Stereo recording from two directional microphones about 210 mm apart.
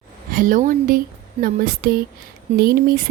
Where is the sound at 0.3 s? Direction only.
40° right (ahead or behind).